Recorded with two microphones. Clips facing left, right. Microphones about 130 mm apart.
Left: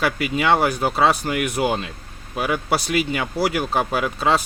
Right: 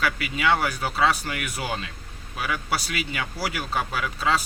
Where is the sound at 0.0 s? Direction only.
40° left (ahead or behind).